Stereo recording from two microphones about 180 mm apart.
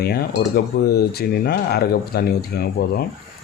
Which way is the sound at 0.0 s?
60° left (ahead or behind).